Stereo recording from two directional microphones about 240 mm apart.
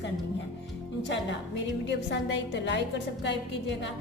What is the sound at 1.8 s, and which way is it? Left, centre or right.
A woman's voice, left.